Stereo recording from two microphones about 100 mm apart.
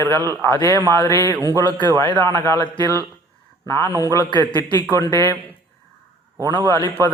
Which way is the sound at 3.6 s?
25° left (ahead or behind).